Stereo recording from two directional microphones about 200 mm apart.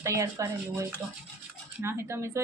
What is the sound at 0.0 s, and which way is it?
Speech, 15° right (ahead or behind).